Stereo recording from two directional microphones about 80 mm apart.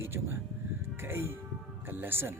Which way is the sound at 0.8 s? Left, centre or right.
Right.